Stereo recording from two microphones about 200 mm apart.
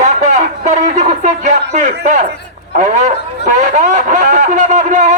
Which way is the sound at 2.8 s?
35° right (ahead or behind).